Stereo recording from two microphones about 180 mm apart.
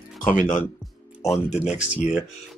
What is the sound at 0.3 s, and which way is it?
Speech, 45° left (ahead or behind).